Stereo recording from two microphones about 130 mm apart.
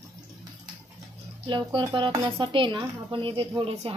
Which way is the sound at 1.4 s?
40° right (ahead or behind).